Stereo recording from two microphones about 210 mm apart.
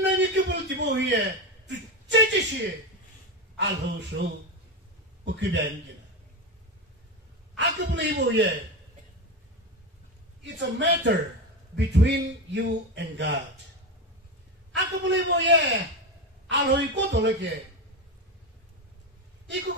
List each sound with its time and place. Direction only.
0.0 s a sound: 55° right (ahead or behind)
3.5 s a man's voice: 55° right (ahead or behind)
7.5 s a man's voice: 55° right (ahead or behind)
10.4 s a man's voice: 55° right (ahead or behind)
14.7 s a man's voice: 55° right (ahead or behind)